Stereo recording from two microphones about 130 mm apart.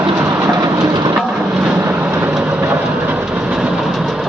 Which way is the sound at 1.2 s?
5° right (ahead or behind).